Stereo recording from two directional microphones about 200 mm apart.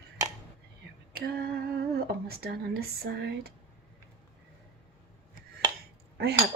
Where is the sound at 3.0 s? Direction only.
55° right (ahead or behind).